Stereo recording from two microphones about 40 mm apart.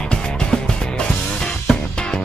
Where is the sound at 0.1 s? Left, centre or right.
Left.